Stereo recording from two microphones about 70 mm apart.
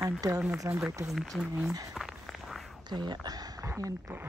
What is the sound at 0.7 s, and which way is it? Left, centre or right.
Speech, right.